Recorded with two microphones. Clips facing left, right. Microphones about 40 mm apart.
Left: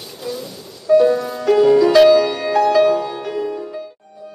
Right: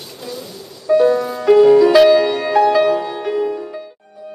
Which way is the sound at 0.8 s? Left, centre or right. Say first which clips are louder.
Even; centre.